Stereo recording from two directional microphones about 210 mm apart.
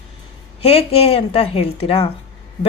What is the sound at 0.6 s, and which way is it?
Speech, 30° left (ahead or behind).